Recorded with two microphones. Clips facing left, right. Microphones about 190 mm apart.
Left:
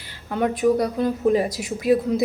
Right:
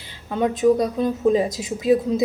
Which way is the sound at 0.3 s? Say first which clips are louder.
Right 2 dB; 20° right (ahead or behind).